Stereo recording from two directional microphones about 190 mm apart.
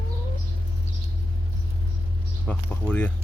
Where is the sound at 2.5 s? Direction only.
10° left (ahead or behind).